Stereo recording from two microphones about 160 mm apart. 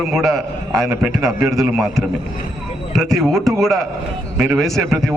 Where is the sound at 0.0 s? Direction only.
Centre (ahead or behind).